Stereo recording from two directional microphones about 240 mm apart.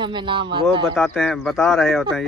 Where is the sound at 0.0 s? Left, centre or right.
Centre.